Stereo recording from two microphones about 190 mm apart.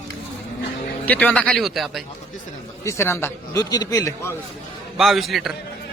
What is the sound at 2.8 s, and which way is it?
A man's voice, 15° left (ahead or behind).